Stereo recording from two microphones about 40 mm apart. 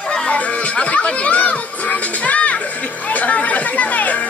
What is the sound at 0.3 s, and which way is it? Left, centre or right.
Speech, left.